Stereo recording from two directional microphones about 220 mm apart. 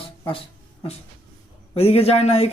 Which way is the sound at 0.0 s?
25° left (ahead or behind).